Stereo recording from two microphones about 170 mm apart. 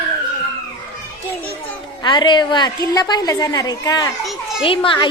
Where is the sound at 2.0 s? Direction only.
25° left (ahead or behind).